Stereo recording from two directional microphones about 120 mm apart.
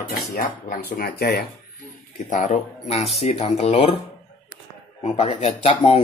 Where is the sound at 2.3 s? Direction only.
85° left; by 3.9 s 60° left (ahead or behind).